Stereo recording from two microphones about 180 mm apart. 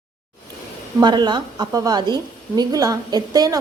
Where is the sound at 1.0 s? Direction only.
25° right (ahead or behind).